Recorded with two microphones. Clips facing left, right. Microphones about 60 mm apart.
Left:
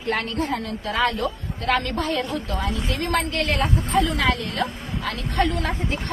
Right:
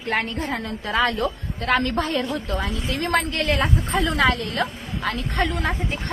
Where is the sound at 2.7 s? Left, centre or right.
Left.